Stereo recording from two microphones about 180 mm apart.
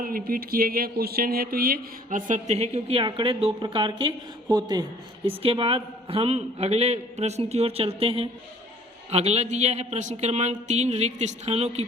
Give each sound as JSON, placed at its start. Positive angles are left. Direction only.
{"t": 0.0, "sound": "a man's voice", "side_deg": -50}